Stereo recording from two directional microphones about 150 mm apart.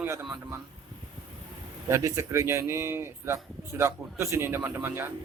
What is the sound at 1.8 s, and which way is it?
Speech, 20° right (ahead or behind).